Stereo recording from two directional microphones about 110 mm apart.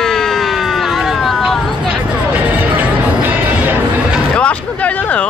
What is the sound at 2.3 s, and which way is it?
Music, 15° right (ahead or behind).